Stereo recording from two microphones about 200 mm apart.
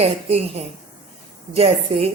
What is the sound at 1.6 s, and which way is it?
Speech, 30° right (ahead or behind).